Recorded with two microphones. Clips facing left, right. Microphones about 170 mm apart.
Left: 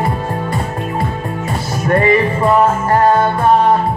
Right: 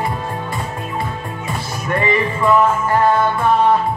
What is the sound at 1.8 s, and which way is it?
Music, 40° left (ahead or behind).